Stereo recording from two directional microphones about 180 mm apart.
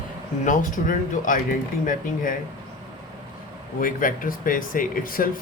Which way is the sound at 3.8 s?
50° left (ahead or behind).